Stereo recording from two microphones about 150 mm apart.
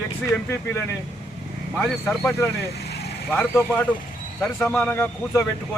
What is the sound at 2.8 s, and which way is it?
Vehicle, 90° left.